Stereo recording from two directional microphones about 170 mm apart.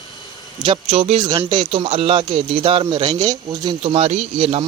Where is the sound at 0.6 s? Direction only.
30° right (ahead or behind).